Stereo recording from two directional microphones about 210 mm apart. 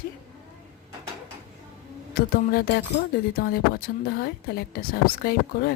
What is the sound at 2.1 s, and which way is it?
Speech, 45° left (ahead or behind).